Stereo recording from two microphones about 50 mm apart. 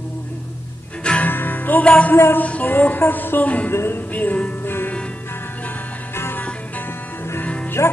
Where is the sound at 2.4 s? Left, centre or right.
Left.